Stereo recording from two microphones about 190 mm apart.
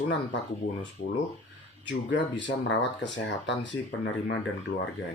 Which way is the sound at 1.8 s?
70° left (ahead or behind).